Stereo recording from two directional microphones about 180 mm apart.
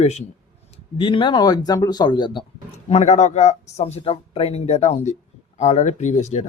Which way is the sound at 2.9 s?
40° left (ahead or behind).